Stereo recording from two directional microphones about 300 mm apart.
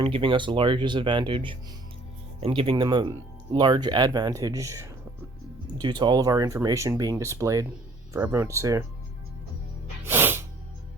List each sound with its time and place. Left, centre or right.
0.0 s speech: centre
10.0 s music: centre